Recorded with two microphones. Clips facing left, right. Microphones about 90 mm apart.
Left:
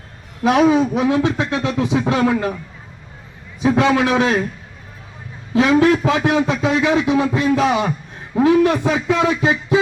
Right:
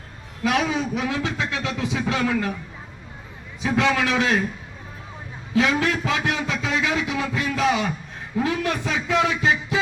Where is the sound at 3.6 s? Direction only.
20° left (ahead or behind).